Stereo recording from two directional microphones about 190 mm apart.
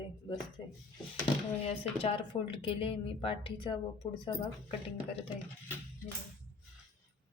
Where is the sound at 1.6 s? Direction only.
30° left (ahead or behind).